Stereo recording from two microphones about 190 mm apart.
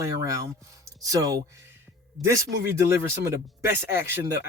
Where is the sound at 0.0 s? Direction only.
15° right (ahead or behind).